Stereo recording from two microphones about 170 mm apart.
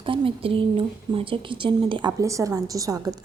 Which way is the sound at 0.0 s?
30° right (ahead or behind).